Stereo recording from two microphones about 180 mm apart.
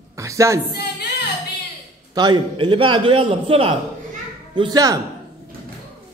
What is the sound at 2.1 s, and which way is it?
A man's voice, 25° right (ahead or behind).